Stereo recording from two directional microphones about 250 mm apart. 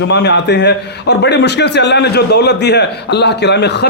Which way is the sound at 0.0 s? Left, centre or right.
Left.